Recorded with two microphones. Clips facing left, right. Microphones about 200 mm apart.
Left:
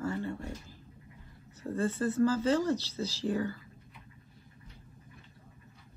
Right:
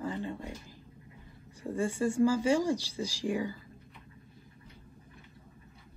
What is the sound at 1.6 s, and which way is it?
Speech, 10° right (ahead or behind).